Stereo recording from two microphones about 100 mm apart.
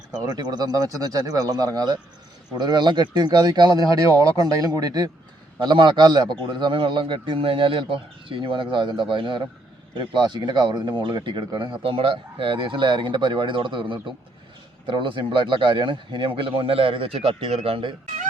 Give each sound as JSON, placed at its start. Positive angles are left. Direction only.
{"t": 0.3, "sound": "a man's voice", "side_deg": -45}
{"t": 5.5, "sound": "a man's voice", "side_deg": -50}
{"t": 11.8, "sound": "a man's voice", "side_deg": -65}